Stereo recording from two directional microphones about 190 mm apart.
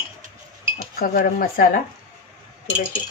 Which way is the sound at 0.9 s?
50° left (ahead or behind).